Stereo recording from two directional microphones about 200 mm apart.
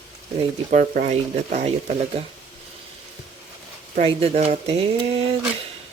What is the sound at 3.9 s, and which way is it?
Speech, 30° right (ahead or behind).